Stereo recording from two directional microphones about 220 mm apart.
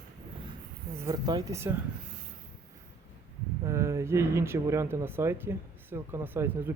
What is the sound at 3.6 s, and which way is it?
Speech, 15° right (ahead or behind).